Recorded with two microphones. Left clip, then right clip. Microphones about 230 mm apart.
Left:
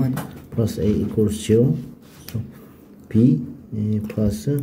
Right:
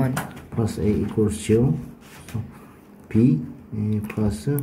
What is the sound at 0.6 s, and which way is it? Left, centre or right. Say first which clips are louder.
Speech: left 2 dB; centre.